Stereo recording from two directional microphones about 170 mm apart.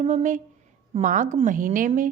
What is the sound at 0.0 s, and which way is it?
A woman's voice, 45° right (ahead or behind).